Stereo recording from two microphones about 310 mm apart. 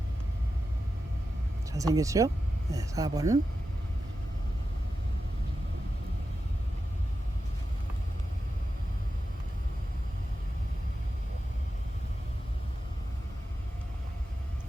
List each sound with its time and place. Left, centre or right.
1.7 s speech: centre